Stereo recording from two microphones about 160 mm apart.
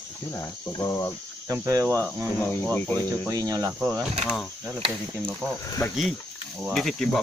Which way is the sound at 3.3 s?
20° right (ahead or behind).